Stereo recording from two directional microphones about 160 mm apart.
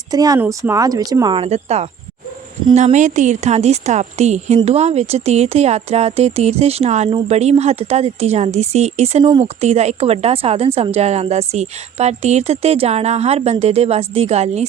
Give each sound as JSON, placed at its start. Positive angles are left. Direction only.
{"t": 0.1, "sound": "speech", "side_deg": -25}
{"t": 1.4, "sound": "a woman's voice", "side_deg": -40}